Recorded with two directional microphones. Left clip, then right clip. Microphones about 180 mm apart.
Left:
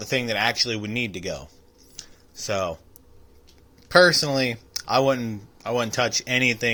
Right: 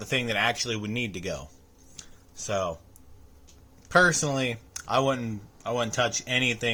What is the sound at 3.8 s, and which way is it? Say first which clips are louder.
Speech: left 5 dB; 15° left (ahead or behind).